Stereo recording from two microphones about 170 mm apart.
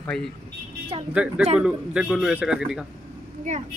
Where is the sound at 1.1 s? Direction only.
5° right (ahead or behind).